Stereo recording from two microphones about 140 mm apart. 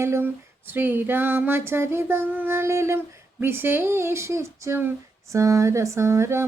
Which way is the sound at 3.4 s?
15° right (ahead or behind).